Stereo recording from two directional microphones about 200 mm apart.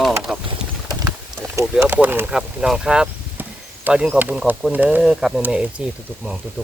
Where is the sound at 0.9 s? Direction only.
15° right (ahead or behind).